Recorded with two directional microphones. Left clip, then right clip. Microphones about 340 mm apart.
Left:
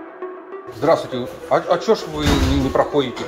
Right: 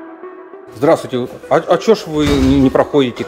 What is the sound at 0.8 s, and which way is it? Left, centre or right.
Speech, right.